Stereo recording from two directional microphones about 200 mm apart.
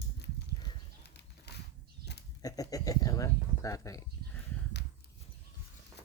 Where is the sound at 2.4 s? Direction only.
15° left (ahead or behind).